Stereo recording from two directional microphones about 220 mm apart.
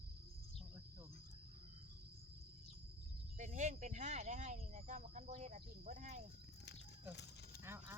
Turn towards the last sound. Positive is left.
turn(degrees=-10)  # may be behind; listen again after turning